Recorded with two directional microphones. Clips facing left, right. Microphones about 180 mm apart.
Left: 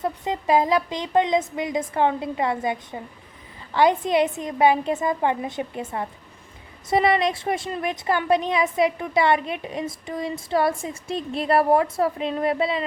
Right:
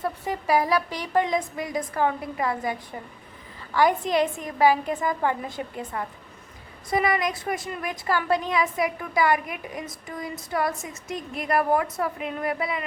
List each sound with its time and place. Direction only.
0.0 s a woman's voice: 20° left (ahead or behind)